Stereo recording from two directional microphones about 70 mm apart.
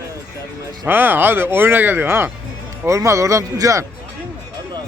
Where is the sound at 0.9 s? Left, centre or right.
Right.